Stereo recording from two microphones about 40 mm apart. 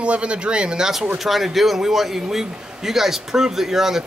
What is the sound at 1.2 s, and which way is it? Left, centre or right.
A man's voice, centre.